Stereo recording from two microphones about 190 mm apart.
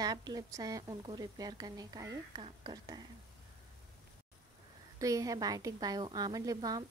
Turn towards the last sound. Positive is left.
turn(degrees=-20)  # may be behind; listen again after turning